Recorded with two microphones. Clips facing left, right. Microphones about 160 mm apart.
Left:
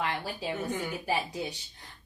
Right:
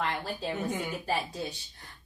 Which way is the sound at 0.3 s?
10° left (ahead or behind).